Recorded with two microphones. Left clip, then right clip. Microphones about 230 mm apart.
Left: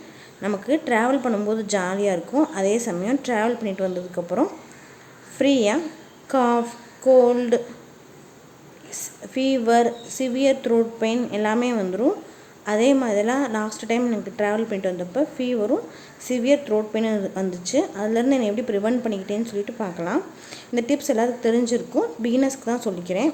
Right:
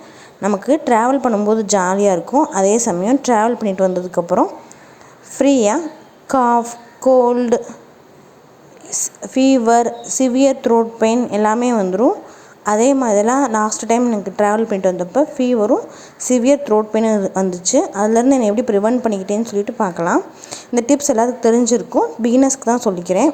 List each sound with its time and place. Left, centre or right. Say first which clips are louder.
0.4 s a woman's voice: right 8 dB; centre
8.9 s speech: right 10 dB; centre